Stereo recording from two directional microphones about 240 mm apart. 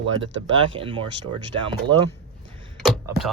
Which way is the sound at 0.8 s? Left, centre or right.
Right.